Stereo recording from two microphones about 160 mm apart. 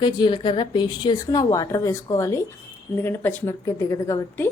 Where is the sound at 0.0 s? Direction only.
30° left (ahead or behind).